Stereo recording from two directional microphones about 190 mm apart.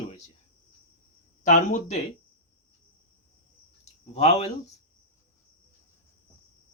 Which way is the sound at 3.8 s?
35° left (ahead or behind).